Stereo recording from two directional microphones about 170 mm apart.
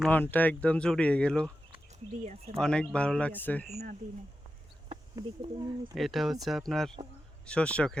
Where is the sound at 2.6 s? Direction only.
5° left (ahead or behind).